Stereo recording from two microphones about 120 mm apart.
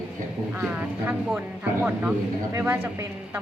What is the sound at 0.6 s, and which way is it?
Speech, 10° right (ahead or behind).